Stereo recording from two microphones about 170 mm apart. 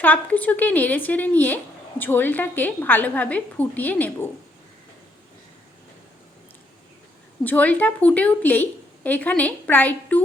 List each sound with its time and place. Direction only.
0.0 s a woman's voice: 10° left (ahead or behind)
7.4 s a woman's voice: 10° left (ahead or behind)